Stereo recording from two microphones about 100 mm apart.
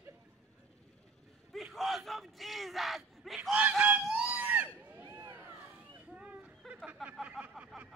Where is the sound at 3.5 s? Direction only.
15° right (ahead or behind).